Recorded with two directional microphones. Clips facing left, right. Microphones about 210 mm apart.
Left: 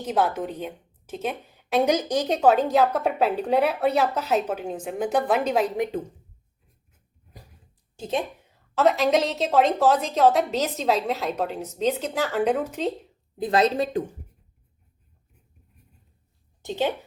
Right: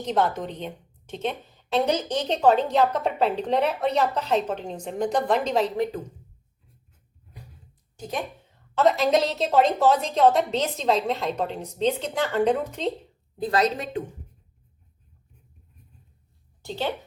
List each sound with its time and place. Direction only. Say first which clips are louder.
0.0 s a woman's voice: even; 5° left (ahead or behind)
7.9 s a woman's voice: left 4 dB; 25° left (ahead or behind)
8.7 s a woman's voice: even; centre (ahead or behind)
13.4 s a woman's voice: left 2 dB; 25° left (ahead or behind)
16.6 s a woman's voice: left 4 dB; 15° left (ahead or behind)